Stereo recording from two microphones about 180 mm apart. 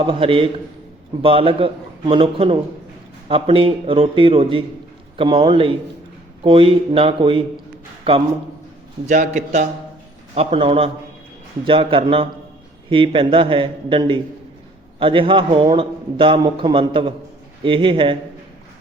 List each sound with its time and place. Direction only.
0.0 s a man's voice: 30° right (ahead or behind)
9.0 s a man's voice: 45° right (ahead or behind)
10.3 s a man's voice: 30° right (ahead or behind)